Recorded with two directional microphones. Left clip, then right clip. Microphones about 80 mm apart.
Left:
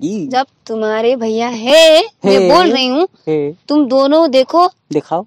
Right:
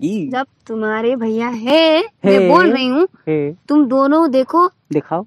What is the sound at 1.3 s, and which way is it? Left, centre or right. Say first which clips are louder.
Speech: left 6 dB; centre.